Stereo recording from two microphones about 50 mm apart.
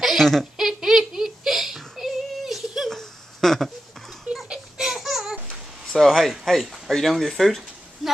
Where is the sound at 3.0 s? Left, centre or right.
Centre.